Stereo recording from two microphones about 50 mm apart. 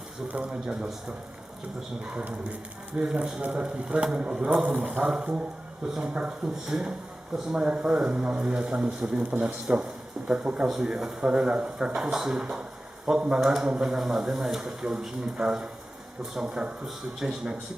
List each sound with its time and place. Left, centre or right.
0.3 s speech: right
2.1 s speech: right
7.5 s speech: right
13.4 s speech: centre